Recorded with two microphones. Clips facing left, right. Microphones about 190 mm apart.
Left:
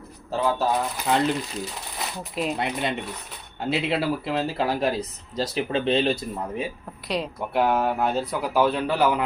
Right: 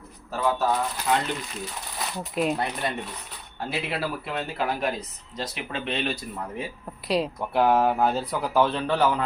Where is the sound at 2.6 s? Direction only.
20° left (ahead or behind).